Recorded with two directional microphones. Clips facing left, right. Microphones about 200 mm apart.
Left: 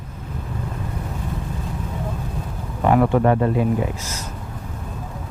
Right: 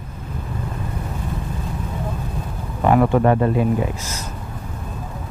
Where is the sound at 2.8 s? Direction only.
25° right (ahead or behind).